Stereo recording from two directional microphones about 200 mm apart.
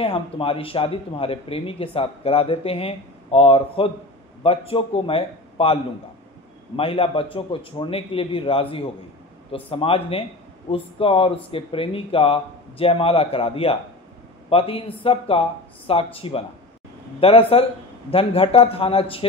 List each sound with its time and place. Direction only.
0.0 s speech: 30° left (ahead or behind)
6.8 s speech: 30° left (ahead or behind)